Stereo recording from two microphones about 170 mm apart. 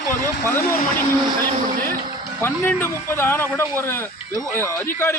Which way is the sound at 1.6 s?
55° right (ahead or behind).